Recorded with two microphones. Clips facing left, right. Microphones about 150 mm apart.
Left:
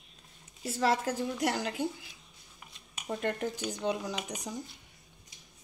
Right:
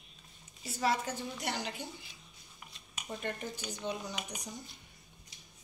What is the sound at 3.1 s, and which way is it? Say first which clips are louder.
Speech: left 7 dB; 70° left (ahead or behind).